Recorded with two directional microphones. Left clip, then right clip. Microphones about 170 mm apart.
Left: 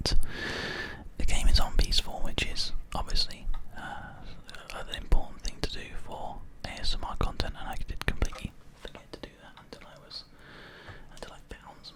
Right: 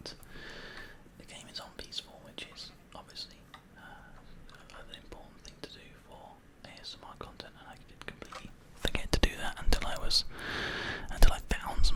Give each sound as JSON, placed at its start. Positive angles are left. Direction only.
{"t": 0.0, "sound": "whispering", "side_deg": 40}
{"t": 3.8, "sound": "a sound", "side_deg": 35}
{"t": 4.5, "sound": "whispering", "side_deg": 35}
{"t": 8.8, "sound": "whispering", "side_deg": -25}